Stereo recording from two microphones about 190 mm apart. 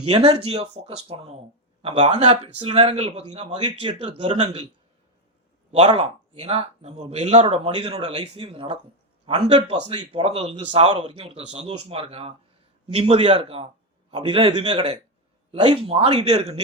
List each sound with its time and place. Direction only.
0.1 s speech: 30° right (ahead or behind)
5.9 s a man's voice: 30° right (ahead or behind)